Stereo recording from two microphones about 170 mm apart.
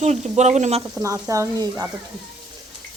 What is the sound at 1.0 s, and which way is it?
Speech, 20° right (ahead or behind).